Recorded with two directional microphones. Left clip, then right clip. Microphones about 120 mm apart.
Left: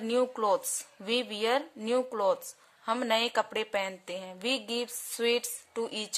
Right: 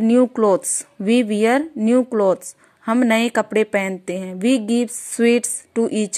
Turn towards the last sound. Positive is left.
turn(degrees=-50)  # may be behind; listen again after turning